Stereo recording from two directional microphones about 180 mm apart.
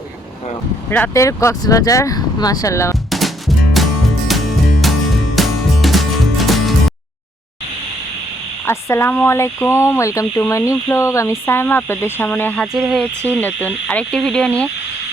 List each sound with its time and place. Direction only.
0.9 s speech: 10° left (ahead or behind)
3.1 s music: centre (ahead or behind)
5.4 s music: centre (ahead or behind)
8.6 s speech: 15° left (ahead or behind)